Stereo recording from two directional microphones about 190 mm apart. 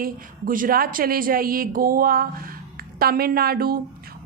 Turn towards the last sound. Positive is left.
turn(degrees=-50)  # may be behind; listen again after turning